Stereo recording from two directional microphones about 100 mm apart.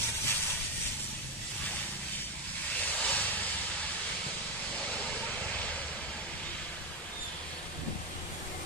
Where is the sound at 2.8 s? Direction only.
15° left (ahead or behind).